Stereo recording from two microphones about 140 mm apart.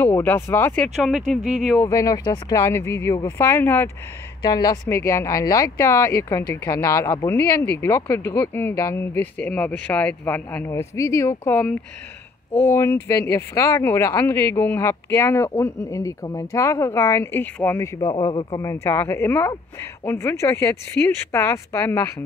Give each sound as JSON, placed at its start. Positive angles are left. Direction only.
{"t": 0.0, "sound": "speech", "side_deg": 15}
{"t": 0.8, "sound": "speech", "side_deg": -5}
{"t": 1.9, "sound": "speech", "side_deg": 25}
{"t": 4.4, "sound": "speech", "side_deg": 30}
{"t": 18.2, "sound": "speech", "side_deg": 40}
{"t": 18.6, "sound": "speech", "side_deg": 20}